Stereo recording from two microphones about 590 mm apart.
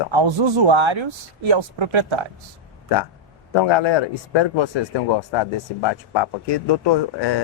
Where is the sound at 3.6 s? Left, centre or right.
Left.